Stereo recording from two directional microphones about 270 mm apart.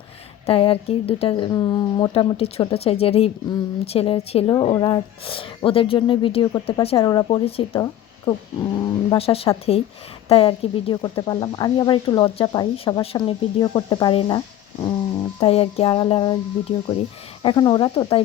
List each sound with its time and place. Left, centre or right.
0.4 s speech: left
7.7 s a sound: centre
9.0 s speech: left